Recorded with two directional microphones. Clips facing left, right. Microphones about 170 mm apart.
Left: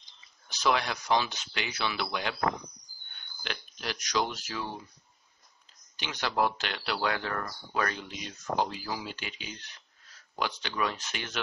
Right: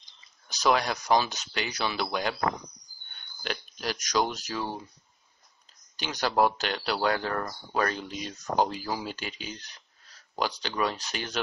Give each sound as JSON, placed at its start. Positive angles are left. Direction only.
{"t": 0.5, "sound": "speech", "side_deg": -40}
{"t": 3.4, "sound": "speech", "side_deg": -40}
{"t": 5.9, "sound": "speech", "side_deg": -40}